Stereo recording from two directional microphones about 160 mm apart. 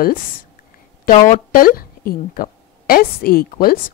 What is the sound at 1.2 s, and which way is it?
A woman's voice, 60° left (ahead or behind).